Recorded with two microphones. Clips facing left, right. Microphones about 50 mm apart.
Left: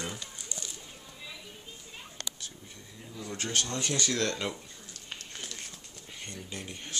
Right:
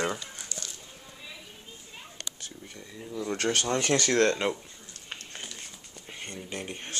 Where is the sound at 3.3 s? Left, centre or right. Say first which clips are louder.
Right 6 dB; right.